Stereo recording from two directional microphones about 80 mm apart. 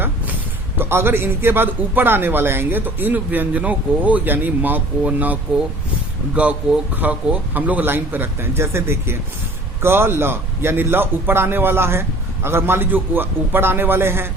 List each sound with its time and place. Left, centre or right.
0.8 s a man's voice: right